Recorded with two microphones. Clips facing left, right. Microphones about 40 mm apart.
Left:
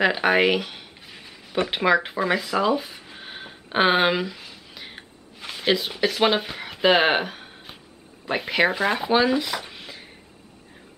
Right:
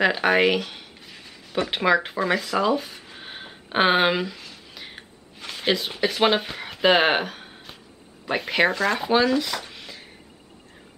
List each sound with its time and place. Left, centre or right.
0.0 s a sound: centre
5.6 s speech: centre
8.7 s speech: centre